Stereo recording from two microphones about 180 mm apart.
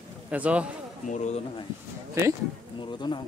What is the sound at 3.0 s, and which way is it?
Speech, 25° left (ahead or behind).